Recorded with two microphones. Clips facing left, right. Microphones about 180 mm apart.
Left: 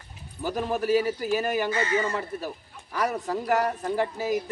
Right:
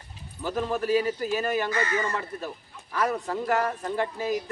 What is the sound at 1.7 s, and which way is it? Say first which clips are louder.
Speech: left 2 dB; 25° left (ahead or behind).